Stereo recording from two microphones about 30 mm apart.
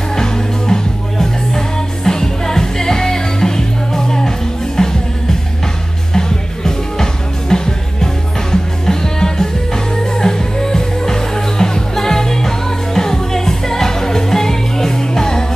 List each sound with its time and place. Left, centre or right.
0.1 s music: centre
6.1 s music: centre